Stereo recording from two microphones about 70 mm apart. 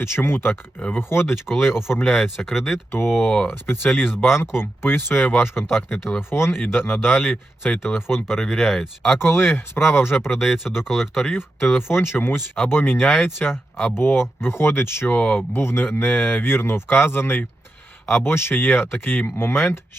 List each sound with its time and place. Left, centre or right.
0.0 s speech: left
2.0 s speech: centre
2.9 s speech: left
3.2 s speech: left
3.5 s speech: left
8.3 s speech: centre
9.1 s speech: left
10.3 s speech: centre
11.3 s speech: left
15.5 s speech: left